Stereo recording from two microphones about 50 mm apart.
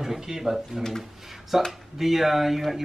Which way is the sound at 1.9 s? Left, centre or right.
Centre.